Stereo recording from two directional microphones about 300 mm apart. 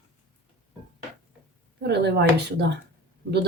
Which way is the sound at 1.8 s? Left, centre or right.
Right.